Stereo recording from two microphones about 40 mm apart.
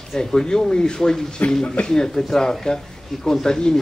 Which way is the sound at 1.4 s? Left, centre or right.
Left.